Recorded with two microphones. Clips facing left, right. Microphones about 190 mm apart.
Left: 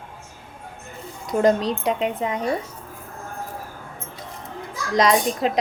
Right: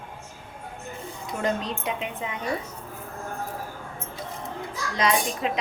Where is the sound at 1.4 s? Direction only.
40° left (ahead or behind).